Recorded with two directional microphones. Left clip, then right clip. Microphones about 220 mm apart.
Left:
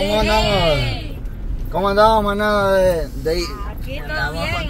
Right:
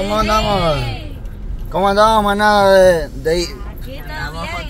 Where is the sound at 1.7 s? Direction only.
25° right (ahead or behind).